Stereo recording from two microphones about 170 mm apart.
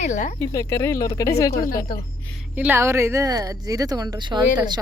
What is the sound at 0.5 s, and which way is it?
Speech, 20° left (ahead or behind).